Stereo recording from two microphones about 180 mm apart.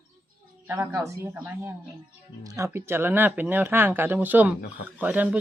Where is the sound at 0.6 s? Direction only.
10° right (ahead or behind).